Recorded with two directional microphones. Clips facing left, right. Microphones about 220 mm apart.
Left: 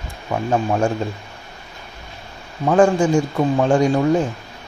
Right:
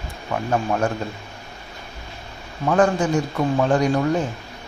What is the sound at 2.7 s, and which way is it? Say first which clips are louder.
Speech: left 4 dB; 30° left (ahead or behind).